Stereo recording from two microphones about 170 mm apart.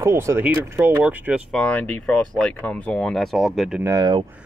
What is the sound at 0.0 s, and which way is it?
Speech, 15° right (ahead or behind).